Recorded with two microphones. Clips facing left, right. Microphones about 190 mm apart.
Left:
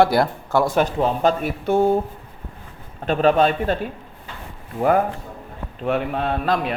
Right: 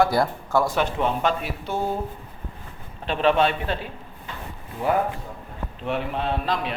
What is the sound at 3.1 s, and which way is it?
Speech, 45° left (ahead or behind).